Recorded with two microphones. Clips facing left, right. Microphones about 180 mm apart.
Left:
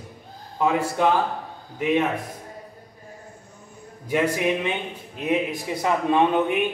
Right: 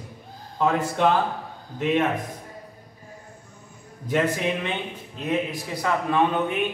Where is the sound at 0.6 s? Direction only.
10° left (ahead or behind).